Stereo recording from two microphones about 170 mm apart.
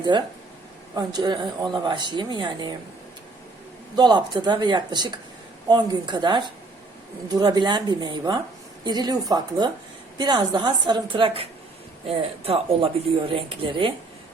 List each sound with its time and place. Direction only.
0.1 s speech: 25° right (ahead or behind)
3.9 s speech: 25° right (ahead or behind)